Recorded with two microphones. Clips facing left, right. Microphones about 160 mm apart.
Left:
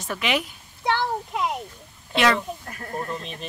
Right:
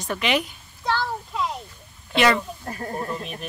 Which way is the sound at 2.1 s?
Centre (ahead or behind).